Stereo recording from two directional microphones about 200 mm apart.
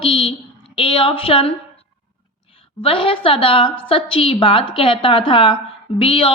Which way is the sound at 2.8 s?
25° left (ahead or behind).